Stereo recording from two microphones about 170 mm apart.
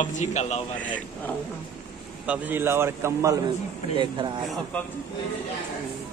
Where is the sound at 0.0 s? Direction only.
45° left (ahead or behind).